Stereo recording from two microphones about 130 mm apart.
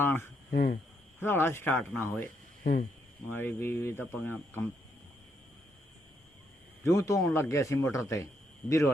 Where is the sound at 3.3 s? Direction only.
15° left (ahead or behind).